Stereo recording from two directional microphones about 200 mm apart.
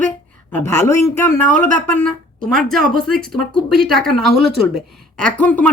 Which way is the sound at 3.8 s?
Centre (ahead or behind).